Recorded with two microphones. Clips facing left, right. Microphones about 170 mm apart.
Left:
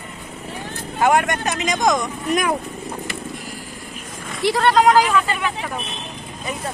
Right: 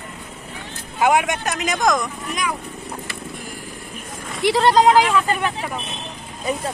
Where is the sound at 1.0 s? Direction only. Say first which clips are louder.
Even; 10° right (ahead or behind).